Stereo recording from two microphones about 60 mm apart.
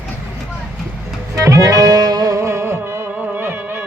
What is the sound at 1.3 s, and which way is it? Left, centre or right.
Music, right.